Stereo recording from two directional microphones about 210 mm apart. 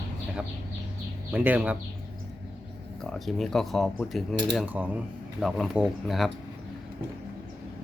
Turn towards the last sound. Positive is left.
turn(degrees=0)  # may be behind; listen again after turning